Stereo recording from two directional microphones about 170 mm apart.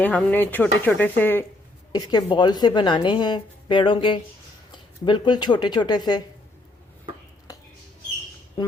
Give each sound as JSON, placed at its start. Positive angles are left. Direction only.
{"t": 0.0, "sound": "speech", "side_deg": 10}
{"t": 1.9, "sound": "a woman's voice", "side_deg": 25}